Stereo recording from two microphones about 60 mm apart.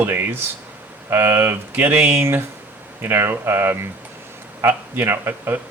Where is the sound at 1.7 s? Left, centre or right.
Right.